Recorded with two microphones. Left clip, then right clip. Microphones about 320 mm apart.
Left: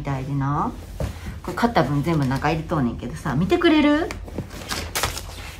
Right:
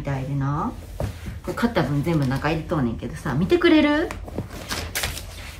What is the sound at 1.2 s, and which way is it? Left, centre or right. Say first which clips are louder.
Speech: left 3 dB; centre.